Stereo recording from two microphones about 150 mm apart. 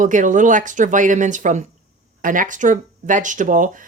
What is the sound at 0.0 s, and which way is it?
Speech, 60° right (ahead or behind).